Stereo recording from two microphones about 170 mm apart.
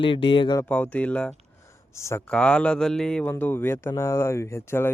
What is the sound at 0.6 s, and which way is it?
Speech, 10° left (ahead or behind).